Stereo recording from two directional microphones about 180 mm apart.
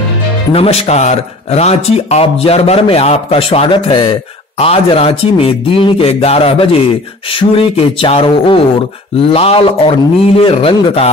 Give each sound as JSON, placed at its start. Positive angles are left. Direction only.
{"t": 0.5, "sound": "speech", "side_deg": 35}